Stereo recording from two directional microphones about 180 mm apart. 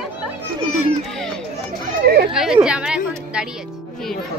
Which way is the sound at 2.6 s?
5° right (ahead or behind).